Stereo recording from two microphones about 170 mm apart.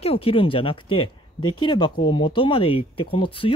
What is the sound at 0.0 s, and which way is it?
Speech, 35° left (ahead or behind).